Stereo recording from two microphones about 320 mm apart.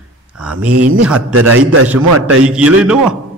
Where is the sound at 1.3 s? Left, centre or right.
Right.